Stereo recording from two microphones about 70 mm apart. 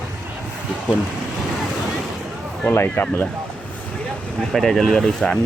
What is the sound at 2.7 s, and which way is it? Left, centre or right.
Speech, left.